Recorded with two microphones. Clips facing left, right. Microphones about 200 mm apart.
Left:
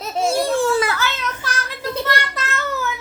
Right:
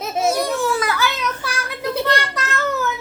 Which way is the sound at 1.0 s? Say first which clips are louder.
Right 2 dB; 10° right (ahead or behind).